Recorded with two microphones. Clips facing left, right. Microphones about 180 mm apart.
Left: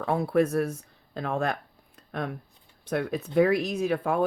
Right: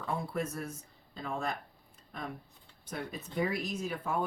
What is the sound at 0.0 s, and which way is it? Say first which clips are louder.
Speech: left 11 dB; 70° left (ahead or behind).